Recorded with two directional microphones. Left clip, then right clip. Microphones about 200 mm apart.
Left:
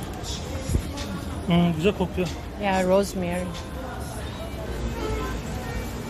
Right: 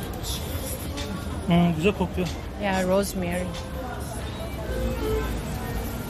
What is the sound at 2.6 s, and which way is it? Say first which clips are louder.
Speech: left 2 dB; 30° left (ahead or behind).